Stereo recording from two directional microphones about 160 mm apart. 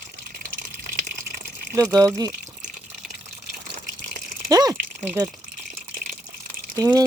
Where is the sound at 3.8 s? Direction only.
60° right (ahead or behind).